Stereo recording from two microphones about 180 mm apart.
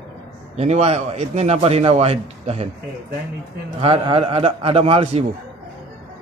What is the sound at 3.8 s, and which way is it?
A man's voice, 30° right (ahead or behind).